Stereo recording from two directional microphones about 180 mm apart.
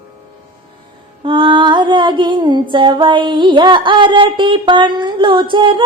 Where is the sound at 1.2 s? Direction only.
25° right (ahead or behind).